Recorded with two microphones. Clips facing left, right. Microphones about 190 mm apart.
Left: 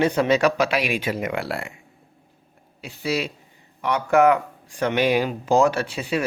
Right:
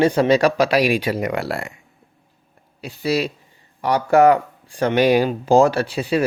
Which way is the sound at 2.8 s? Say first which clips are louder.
Right 4 dB; 35° right (ahead or behind).